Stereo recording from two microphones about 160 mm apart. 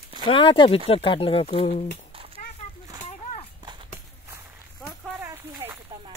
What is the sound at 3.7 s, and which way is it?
Horse, 25° right (ahead or behind).